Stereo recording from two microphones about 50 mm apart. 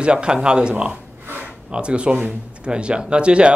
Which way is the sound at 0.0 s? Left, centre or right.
Centre.